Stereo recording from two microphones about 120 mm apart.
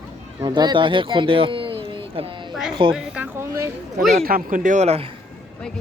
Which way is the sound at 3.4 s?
20° right (ahead or behind).